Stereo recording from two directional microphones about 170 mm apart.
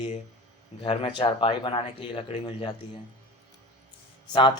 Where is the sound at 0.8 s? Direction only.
30° left (ahead or behind).